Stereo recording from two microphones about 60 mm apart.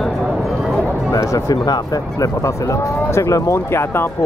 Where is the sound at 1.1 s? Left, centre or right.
Left.